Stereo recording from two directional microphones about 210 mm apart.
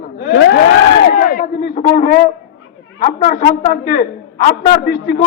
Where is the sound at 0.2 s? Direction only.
50° left (ahead or behind).